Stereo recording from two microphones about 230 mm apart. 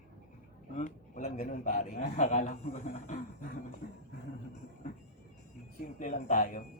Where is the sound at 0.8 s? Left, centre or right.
Left.